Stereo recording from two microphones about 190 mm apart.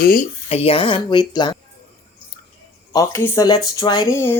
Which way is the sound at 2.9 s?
15° left (ahead or behind).